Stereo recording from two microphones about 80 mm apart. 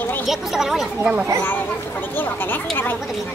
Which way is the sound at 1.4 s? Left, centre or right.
Left.